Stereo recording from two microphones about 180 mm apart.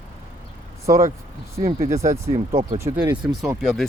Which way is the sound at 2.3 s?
40° right (ahead or behind).